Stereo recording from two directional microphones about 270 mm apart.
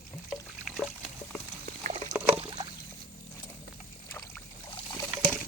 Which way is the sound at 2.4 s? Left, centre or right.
Centre.